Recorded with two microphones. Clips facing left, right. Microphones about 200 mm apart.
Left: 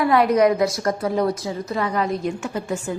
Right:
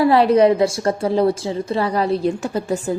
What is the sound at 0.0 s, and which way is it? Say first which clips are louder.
A woman's voice: right 3 dB; 30° right (ahead or behind).